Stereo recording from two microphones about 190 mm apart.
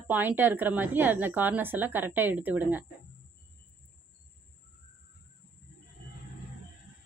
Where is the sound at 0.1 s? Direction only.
10° right (ahead or behind).